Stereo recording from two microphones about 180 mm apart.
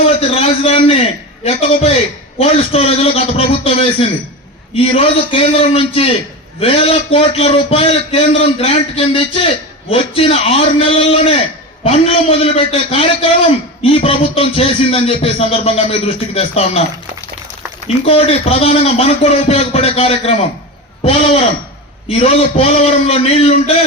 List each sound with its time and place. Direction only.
0.0 s a man's voice: 35° left (ahead or behind)
17.8 s a man's voice: 30° left (ahead or behind)
22.1 s a man's voice: 35° left (ahead or behind)